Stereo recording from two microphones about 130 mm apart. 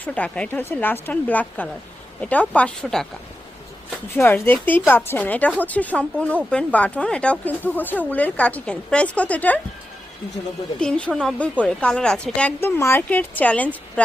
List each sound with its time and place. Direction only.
0.0 s speech: 10° left (ahead or behind)
10.8 s speech: 5° left (ahead or behind)